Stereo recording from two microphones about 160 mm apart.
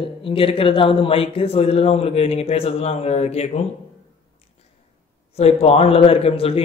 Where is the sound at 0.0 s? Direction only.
35° left (ahead or behind).